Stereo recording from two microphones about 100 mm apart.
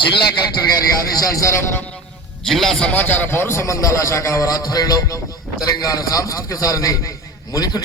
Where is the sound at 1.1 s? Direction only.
35° left (ahead or behind).